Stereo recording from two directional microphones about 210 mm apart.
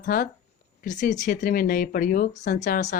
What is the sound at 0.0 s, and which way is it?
Speech, 45° left (ahead or behind).